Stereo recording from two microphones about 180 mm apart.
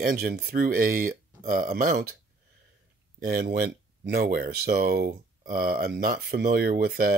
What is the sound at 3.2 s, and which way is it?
Speech, 55° right (ahead or behind).